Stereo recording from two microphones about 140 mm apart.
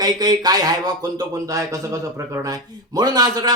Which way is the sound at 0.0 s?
30° right (ahead or behind).